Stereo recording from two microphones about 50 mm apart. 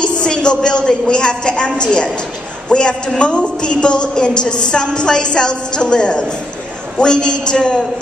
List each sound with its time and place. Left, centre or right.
0.0 s a woman's voice: centre